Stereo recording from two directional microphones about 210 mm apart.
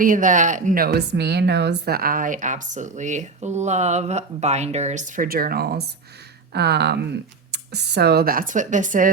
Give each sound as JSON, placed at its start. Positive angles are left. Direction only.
{"t": 0.0, "sound": "a woman's voice", "side_deg": -40}